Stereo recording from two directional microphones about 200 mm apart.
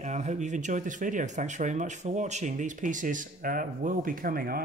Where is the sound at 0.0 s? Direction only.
35° right (ahead or behind).